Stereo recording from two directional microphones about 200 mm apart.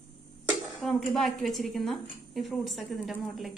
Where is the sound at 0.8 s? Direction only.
Centre (ahead or behind).